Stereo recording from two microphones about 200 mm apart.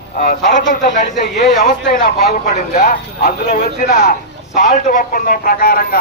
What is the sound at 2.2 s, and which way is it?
A man's voice, 50° left (ahead or behind).